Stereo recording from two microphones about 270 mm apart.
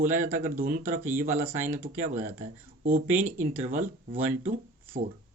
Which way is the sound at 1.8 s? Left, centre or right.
Right.